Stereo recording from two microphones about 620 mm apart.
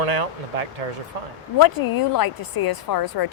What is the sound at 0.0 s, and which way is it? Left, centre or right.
Speech, right.